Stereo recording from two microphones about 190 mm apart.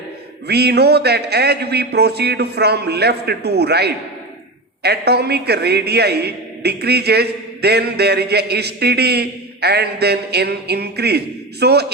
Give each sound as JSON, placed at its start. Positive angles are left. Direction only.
{"t": 0.4, "sound": "a man's voice", "side_deg": -60}